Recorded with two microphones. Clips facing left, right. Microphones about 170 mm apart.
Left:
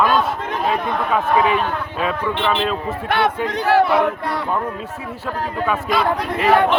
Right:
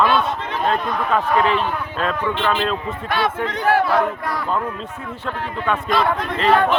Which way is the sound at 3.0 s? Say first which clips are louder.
Left 3 dB; 60° left (ahead or behind).